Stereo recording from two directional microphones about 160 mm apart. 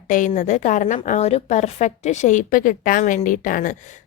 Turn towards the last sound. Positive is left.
turn(degrees=55)  # may be behind; listen again after turning